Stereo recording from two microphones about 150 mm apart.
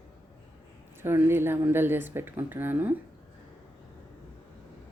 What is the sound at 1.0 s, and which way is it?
Speech, 15° right (ahead or behind).